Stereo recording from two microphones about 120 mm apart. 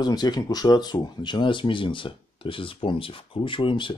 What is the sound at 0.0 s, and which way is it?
Speech, 35° left (ahead or behind).